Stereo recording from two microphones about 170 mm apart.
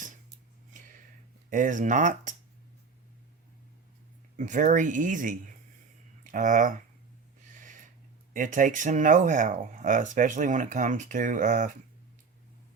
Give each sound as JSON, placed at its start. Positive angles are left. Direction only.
{"t": 1.5, "sound": "speech", "side_deg": -50}
{"t": 4.4, "sound": "speech", "side_deg": -45}
{"t": 8.3, "sound": "speech", "side_deg": -50}